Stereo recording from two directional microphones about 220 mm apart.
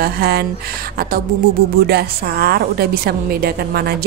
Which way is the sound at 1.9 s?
45° right (ahead or behind).